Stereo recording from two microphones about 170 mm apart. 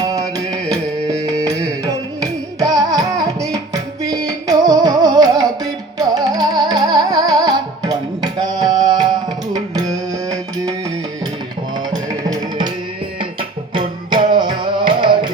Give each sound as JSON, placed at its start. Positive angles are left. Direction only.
{"t": 0.0, "sound": "music", "side_deg": -20}
{"t": 12.3, "sound": "music", "side_deg": -25}
{"t": 13.7, "sound": "music", "side_deg": -30}